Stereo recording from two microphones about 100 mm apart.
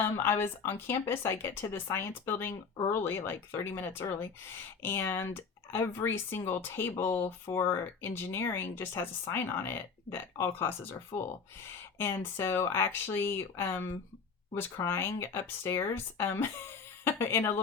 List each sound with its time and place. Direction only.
0.0 s speech: 20° left (ahead or behind)